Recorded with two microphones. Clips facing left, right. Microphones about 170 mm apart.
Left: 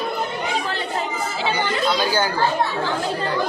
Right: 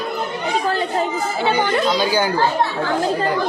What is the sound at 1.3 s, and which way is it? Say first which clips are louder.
Children playing: right 5 dB; 55° right (ahead or behind).